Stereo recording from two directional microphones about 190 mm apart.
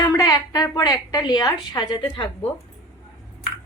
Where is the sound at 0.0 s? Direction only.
15° left (ahead or behind).